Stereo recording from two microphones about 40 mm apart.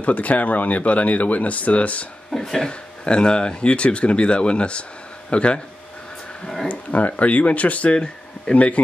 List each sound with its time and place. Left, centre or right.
0.0 s speech: left
2.3 s speech: centre
3.1 s speech: left
6.7 s speech: left
7.9 s speech: left
8.5 s speech: left